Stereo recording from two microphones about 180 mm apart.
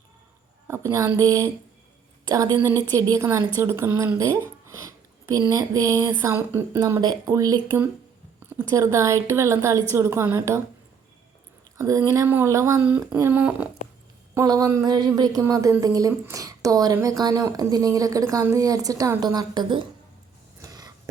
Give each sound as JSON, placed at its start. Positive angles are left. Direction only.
{"t": 0.7, "sound": "speech", "side_deg": -15}
{"t": 11.8, "sound": "speech", "side_deg": -15}
{"t": 14.3, "sound": "a woman's voice", "side_deg": -20}
{"t": 20.6, "sound": "a sound", "side_deg": -20}